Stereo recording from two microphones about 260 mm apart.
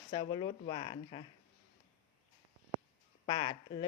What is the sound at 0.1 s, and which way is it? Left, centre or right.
Speech, centre.